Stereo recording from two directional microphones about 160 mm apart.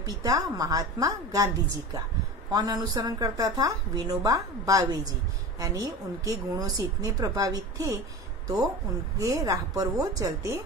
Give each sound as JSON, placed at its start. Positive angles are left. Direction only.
{"t": 0.0, "sound": "a woman's voice", "side_deg": -20}
{"t": 2.5, "sound": "a woman's voice", "side_deg": -25}
{"t": 9.2, "sound": "a woman's voice", "side_deg": -20}